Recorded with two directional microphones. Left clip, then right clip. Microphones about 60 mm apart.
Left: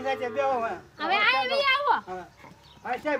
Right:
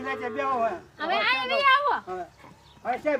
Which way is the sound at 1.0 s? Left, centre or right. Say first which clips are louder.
Left 2 dB; left.